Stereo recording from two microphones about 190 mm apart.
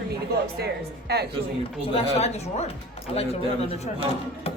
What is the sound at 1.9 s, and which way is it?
A man's voice, 35° left (ahead or behind).